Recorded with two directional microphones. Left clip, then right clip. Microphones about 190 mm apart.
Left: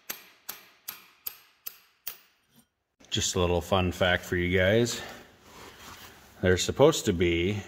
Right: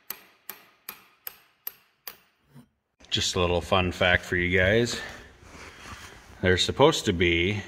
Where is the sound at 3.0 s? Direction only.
20° left (ahead or behind).